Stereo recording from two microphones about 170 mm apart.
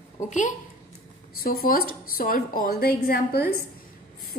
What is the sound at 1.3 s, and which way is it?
A woman's voice, 60° left (ahead or behind).